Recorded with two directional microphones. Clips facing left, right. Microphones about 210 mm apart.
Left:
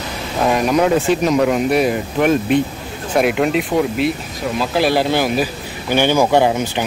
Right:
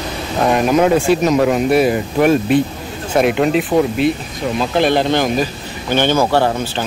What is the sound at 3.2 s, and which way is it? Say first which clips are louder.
Speech: right 2 dB; centre (ahead or behind).